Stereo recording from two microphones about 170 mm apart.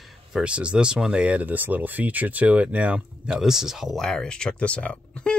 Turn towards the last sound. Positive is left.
turn(degrees=5)  # may be behind; listen again after turning